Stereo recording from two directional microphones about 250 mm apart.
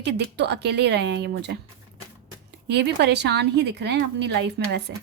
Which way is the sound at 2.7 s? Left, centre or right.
Right.